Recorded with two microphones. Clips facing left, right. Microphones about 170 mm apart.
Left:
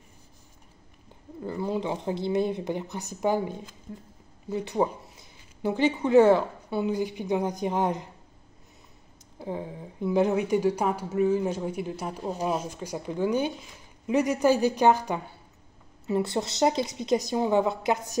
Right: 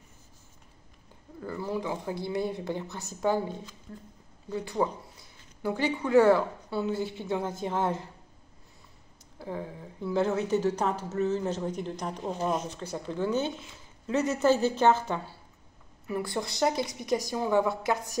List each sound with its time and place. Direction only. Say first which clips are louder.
1.4 s a woman's voice: left 3 dB; 20° left (ahead or behind)
9.4 s a woman's voice: left 3 dB; 20° left (ahead or behind)